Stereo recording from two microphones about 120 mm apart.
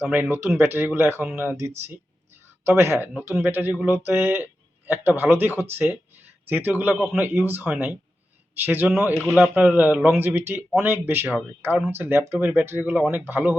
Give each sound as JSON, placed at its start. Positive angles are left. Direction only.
{"t": 0.0, "sound": "speech", "side_deg": -20}